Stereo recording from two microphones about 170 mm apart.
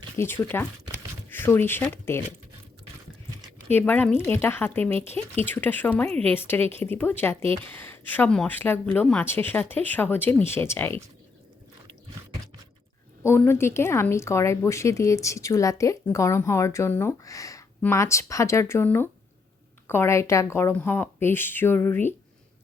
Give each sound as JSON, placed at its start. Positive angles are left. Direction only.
{"t": 0.2, "sound": "speech", "side_deg": 15}
{"t": 3.8, "sound": "speech", "side_deg": 10}
{"t": 13.2, "sound": "speech", "side_deg": 15}